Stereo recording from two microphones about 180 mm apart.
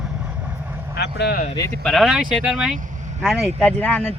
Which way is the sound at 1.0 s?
65° left (ahead or behind).